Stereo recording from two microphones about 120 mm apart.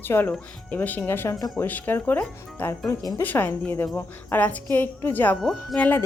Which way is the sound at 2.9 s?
25° left (ahead or behind).